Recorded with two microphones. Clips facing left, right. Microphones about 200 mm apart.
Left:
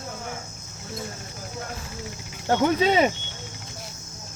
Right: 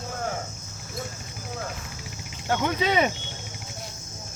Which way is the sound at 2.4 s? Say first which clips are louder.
Left 4 dB; 30° left (ahead or behind).